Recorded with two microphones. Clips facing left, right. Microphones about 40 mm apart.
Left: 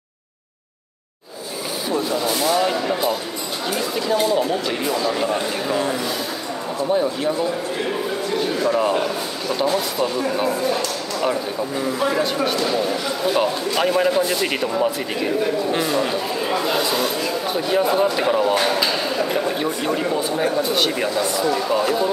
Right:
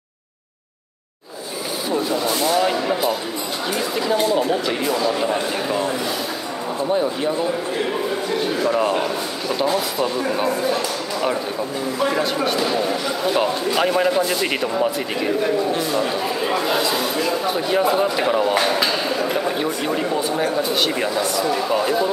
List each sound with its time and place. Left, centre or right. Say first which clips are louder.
1.9 s speech: even; centre
10.8 s a sound: even; centre
12.0 s speech: right 1 dB; centre